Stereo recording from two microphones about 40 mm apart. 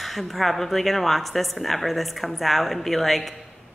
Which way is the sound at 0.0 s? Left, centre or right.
Centre.